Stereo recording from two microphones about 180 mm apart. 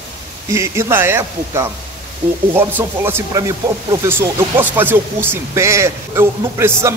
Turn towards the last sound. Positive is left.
turn(degrees=-15)  # may be behind; listen again after turning